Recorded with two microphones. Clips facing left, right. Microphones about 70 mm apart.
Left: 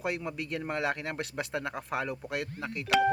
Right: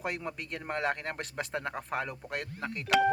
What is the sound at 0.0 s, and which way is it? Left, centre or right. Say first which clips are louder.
Speech: left 2 dB; right.